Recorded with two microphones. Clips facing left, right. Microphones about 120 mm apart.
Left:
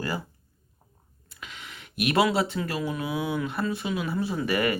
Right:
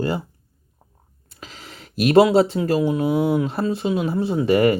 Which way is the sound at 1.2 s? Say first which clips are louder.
Right 3 dB; 35° right (ahead or behind).